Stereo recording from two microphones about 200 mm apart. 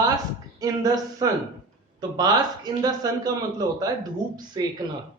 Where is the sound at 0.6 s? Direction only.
20° right (ahead or behind).